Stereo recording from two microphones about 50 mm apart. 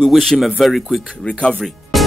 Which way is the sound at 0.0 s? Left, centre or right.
Centre.